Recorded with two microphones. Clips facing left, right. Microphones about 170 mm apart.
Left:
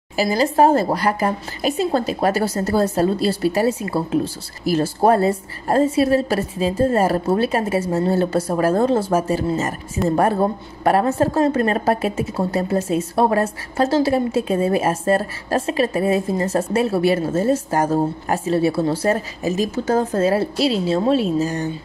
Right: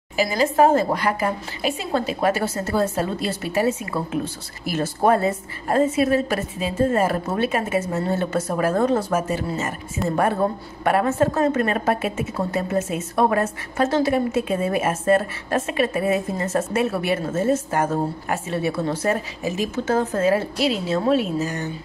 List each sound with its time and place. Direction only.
0.1 s a woman's voice: 40° left (ahead or behind)
10.8 s a woman's voice: 35° left (ahead or behind)